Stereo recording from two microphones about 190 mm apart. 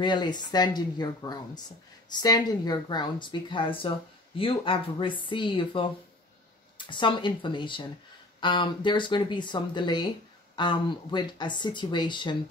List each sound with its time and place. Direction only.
0.0 s speech: 25° left (ahead or behind)